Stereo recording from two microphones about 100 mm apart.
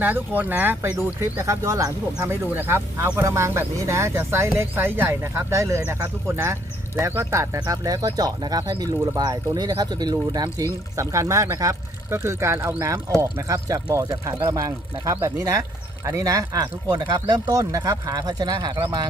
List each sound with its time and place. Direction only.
0.0 s speech: 20° right (ahead or behind); by 18.9 s 45° right (ahead or behind)